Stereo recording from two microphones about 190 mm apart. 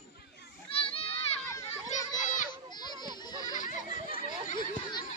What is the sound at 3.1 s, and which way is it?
Goat, 20° left (ahead or behind).